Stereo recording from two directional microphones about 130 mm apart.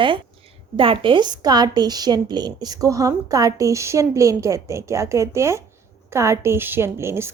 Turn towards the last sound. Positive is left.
turn(degrees=-20)  # may be behind; listen again after turning